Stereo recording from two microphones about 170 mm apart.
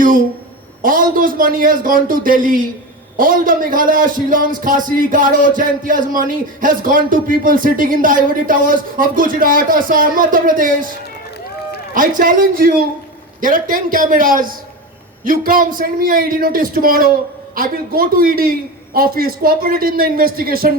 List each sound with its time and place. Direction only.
0.8 s a man's voice: 55° right (ahead or behind)
11.9 s a man's voice: 55° right (ahead or behind)